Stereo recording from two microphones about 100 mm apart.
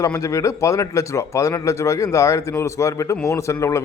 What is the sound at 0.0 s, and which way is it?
A man's voice, 35° left (ahead or behind).